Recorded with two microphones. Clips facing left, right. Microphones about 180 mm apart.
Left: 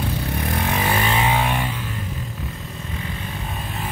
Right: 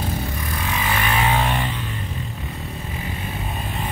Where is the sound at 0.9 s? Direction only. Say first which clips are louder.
Right 2 dB; 20° left (ahead or behind).